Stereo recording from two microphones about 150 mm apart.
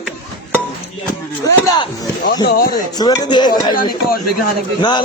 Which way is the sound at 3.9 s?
75° left (ahead or behind).